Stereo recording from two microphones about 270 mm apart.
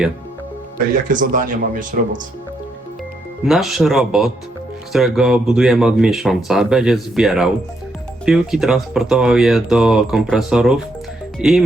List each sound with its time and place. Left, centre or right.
1.0 s speech: right
3.4 s speech: centre